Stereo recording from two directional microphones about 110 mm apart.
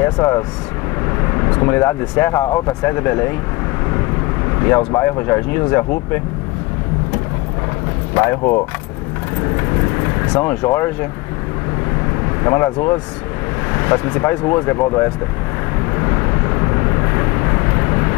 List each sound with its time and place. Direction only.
0.0 s speech: 25° left (ahead or behind)
4.6 s speech: 25° left (ahead or behind)
9.6 s speech: 25° left (ahead or behind)
12.4 s speech: 20° left (ahead or behind)
16.0 s vehicle: 25° left (ahead or behind)